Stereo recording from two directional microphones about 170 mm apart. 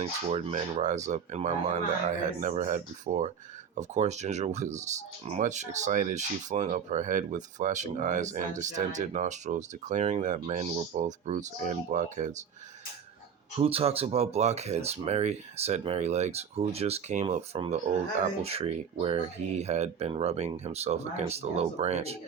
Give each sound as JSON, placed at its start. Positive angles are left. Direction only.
{"t": 0.0, "sound": "speech", "side_deg": -40}
{"t": 13.6, "sound": "speech", "side_deg": -35}